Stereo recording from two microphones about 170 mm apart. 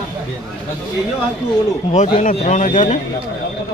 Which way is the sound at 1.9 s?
50° left (ahead or behind).